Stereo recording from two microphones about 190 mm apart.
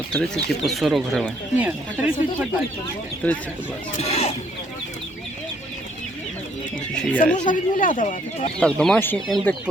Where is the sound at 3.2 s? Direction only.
10° left (ahead or behind).